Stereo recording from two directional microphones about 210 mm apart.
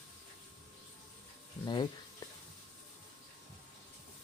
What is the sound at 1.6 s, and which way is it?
Speech, 20° left (ahead or behind).